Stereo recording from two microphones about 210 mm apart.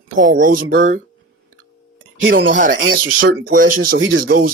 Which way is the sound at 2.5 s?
40° right (ahead or behind).